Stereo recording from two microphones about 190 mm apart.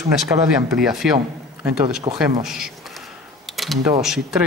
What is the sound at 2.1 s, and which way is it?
Speech, 30° right (ahead or behind).